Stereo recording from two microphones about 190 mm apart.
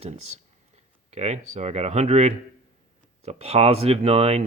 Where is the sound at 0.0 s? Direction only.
35° right (ahead or behind).